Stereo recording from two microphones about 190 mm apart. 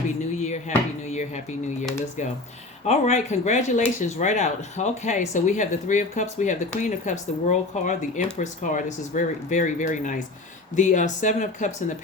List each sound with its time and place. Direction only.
0.3 s a sound: 35° left (ahead or behind)
1.0 s speech: 35° left (ahead or behind)
2.8 s speech: 35° left (ahead or behind)